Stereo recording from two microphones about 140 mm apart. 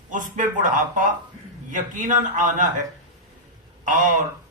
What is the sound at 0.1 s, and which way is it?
A man's voice, 65° right (ahead or behind).